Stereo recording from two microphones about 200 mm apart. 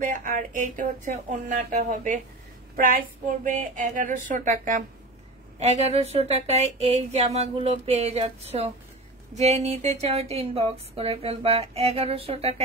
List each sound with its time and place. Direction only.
0.0 s speech: 40° right (ahead or behind)
3.4 s speech: 40° right (ahead or behind)
5.6 s speech: 35° right (ahead or behind)